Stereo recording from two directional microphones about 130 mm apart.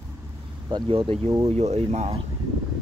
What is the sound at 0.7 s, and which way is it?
Speech, 40° right (ahead or behind).